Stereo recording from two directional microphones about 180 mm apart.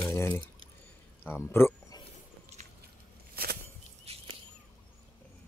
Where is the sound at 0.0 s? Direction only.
15° left (ahead or behind).